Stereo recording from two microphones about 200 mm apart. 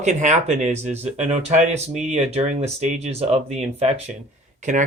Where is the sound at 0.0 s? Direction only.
35° right (ahead or behind).